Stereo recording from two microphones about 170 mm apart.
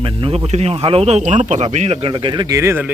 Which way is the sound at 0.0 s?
30° right (ahead or behind).